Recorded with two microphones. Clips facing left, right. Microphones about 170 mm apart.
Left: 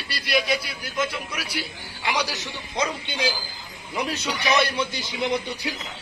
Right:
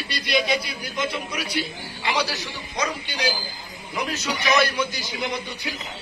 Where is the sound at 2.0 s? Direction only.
15° left (ahead or behind).